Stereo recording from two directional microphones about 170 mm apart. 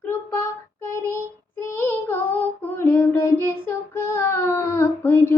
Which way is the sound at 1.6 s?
15° left (ahead or behind).